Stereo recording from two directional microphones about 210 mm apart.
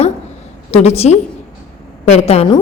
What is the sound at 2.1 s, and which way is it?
Speech, 30° left (ahead or behind).